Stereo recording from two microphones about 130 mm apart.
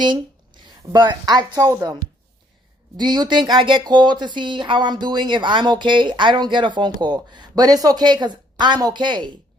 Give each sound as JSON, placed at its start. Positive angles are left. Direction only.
{"t": 0.0, "sound": "speech", "side_deg": -35}
{"t": 3.0, "sound": "speech", "side_deg": -35}